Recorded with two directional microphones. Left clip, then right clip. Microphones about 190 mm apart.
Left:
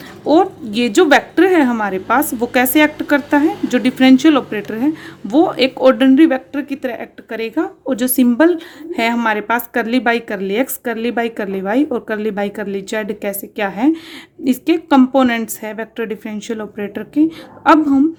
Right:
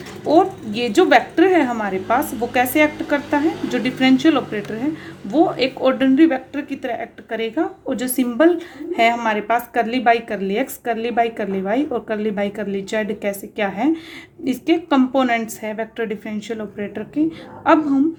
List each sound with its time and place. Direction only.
0.3 s speech: 40° left (ahead or behind)